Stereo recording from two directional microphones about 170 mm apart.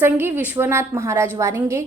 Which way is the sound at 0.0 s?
10° right (ahead or behind).